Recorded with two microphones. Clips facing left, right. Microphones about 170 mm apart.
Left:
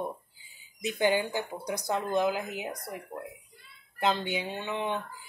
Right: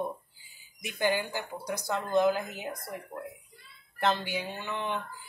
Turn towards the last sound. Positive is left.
turn(degrees=25)  # may be behind; listen again after turning